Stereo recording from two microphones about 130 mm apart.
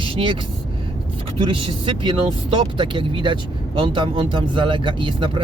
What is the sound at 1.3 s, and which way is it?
Speech, 45° right (ahead or behind).